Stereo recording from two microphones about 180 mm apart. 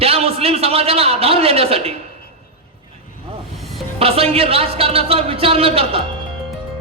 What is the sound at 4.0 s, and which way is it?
A man's voice, 35° right (ahead or behind).